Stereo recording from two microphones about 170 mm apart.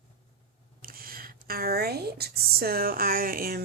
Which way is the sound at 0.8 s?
60° right (ahead or behind).